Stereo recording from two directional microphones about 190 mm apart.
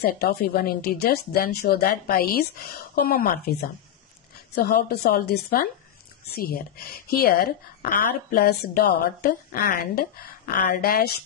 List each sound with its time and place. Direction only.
0.0 s speech: 55° left (ahead or behind)
4.6 s speech: 55° left (ahead or behind)